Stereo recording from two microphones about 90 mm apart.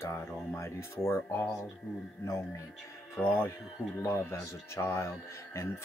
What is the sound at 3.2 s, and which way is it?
Speech, 20° left (ahead or behind).